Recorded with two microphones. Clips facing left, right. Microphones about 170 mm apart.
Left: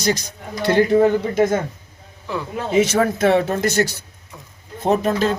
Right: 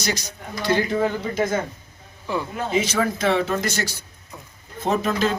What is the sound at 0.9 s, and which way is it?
Speech, 45° left (ahead or behind).